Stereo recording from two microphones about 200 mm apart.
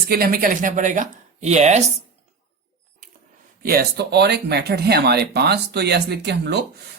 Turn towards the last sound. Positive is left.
turn(degrees=-55)  # may be behind; listen again after turning